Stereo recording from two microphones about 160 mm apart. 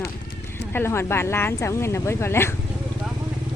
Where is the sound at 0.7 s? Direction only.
15° left (ahead or behind).